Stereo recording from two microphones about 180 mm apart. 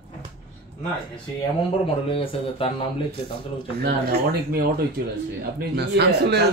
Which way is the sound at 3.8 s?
60° right (ahead or behind).